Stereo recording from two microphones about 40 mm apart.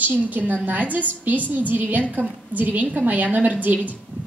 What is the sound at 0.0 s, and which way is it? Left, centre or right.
A woman's voice, right.